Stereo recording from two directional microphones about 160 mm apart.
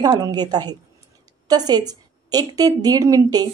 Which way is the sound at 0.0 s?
25° right (ahead or behind).